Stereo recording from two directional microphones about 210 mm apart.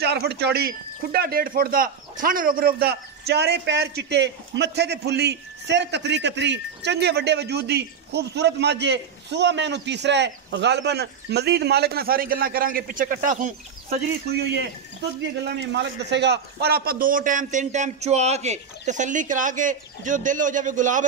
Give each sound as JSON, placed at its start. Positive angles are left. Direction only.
{"t": 0.0, "sound": "a man's voice", "side_deg": -50}